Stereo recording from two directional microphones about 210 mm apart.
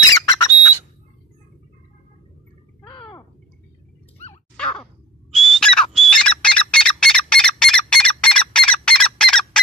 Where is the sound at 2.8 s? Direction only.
20° left (ahead or behind).